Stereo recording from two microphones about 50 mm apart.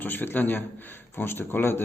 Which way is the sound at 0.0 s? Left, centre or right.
Left.